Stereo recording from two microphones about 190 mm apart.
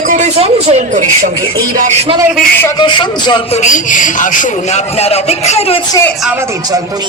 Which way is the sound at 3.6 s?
45° left (ahead or behind).